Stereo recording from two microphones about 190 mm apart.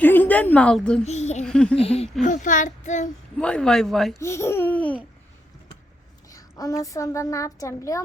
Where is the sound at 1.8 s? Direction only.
30° left (ahead or behind).